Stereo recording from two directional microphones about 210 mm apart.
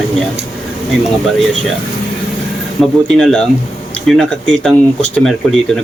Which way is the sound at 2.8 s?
5° left (ahead or behind).